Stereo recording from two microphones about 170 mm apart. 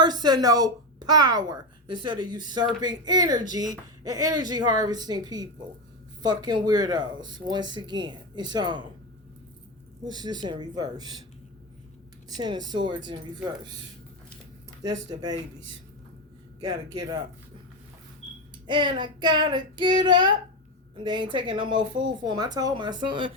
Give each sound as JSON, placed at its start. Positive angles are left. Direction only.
{"t": 0.0, "sound": "speech", "side_deg": -25}
{"t": 10.0, "sound": "speech", "side_deg": -25}
{"t": 12.4, "sound": "speech", "side_deg": -25}
{"t": 14.8, "sound": "speech", "side_deg": -25}
{"t": 18.7, "sound": "speech", "side_deg": -30}